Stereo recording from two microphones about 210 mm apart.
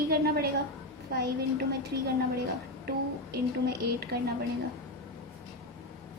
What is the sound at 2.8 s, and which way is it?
A woman's voice, 45° right (ahead or behind).